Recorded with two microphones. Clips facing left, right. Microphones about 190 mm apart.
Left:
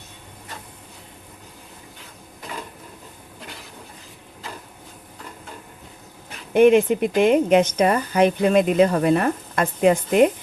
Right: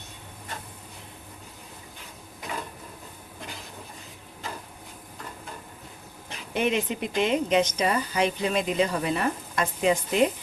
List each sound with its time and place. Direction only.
6.5 s a woman's voice: 55° left (ahead or behind)